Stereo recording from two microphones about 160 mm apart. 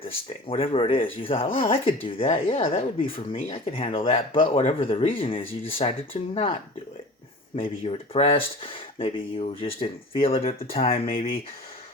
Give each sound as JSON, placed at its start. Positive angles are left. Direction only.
{"t": 0.3, "sound": "speech", "side_deg": 35}